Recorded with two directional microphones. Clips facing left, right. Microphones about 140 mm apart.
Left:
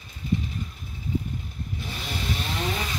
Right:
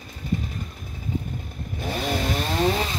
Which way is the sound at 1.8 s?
50° right (ahead or behind).